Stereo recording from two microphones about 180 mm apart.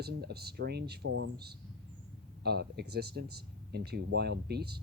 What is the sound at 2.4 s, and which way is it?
Speech, 65° right (ahead or behind).